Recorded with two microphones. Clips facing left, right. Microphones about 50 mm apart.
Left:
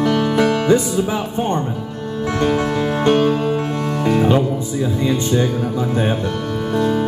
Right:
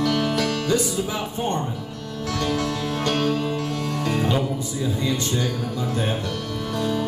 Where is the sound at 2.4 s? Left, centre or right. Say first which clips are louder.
Left 7 dB; left.